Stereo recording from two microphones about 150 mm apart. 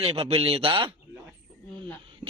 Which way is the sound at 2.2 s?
40° right (ahead or behind).